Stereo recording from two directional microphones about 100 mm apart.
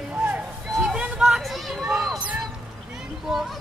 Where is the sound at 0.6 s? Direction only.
5° right (ahead or behind).